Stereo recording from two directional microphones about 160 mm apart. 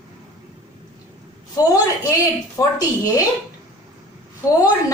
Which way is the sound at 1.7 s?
20° left (ahead or behind).